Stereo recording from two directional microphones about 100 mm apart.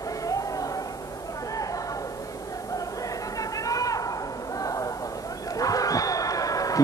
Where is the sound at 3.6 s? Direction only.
35° left (ahead or behind).